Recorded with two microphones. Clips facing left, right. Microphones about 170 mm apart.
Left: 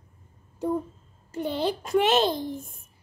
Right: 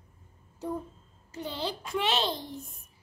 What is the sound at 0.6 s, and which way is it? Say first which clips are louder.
A child's voice: left 7 dB; 60° left (ahead or behind).